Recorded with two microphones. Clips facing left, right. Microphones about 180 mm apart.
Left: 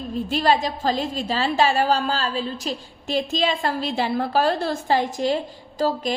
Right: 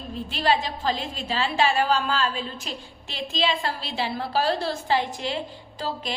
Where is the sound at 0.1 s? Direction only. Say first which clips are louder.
Left 4 dB; 45° left (ahead or behind).